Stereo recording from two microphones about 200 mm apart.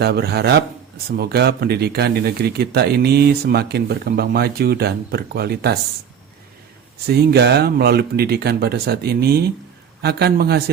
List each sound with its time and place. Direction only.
0.0 s speech: 50° right (ahead or behind)
7.1 s speech: 55° right (ahead or behind)